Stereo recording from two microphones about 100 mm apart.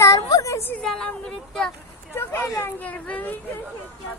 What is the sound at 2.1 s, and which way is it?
Speech, 25° left (ahead or behind).